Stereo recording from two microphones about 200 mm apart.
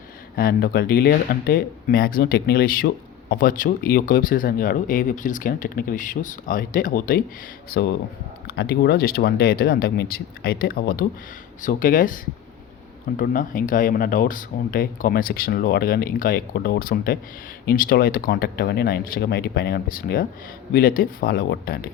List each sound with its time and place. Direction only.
0.3 s speech: 50° left (ahead or behind)
7.7 s speech: 55° left (ahead or behind)